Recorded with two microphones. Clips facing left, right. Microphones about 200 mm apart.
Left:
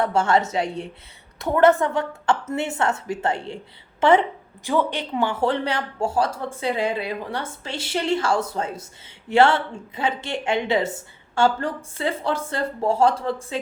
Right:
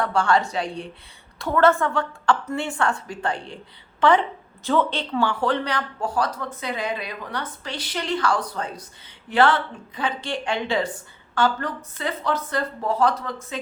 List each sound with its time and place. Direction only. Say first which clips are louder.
0.0 s speech: left 1 dB; 20° left (ahead or behind)